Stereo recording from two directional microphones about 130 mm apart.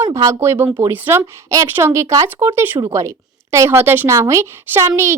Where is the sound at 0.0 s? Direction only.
25° right (ahead or behind).